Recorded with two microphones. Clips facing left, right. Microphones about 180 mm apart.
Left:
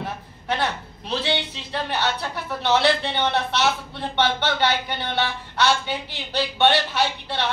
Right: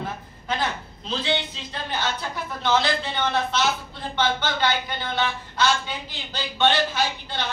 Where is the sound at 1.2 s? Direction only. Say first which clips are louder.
Right 3 dB; 70° left (ahead or behind).